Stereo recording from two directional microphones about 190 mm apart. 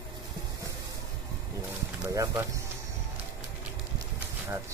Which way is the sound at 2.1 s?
15° right (ahead or behind).